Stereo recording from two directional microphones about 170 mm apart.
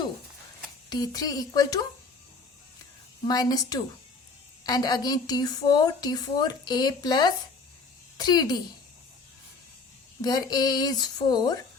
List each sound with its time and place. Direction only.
0.9 s a woman's voice: 20° left (ahead or behind)
3.2 s a woman's voice: 20° left (ahead or behind)
10.2 s a woman's voice: 25° left (ahead or behind)